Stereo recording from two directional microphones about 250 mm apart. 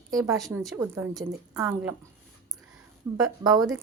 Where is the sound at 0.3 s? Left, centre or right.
Centre.